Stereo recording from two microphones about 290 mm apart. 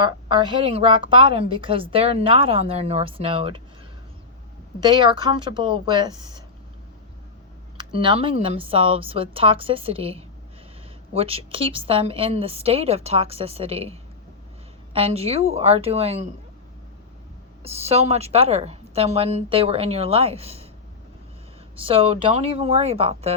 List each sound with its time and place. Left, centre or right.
0.0 s a woman's voice: centre
4.8 s a woman's voice: centre
7.9 s a woman's voice: centre
17.6 s a woman's voice: right
21.8 s a woman's voice: centre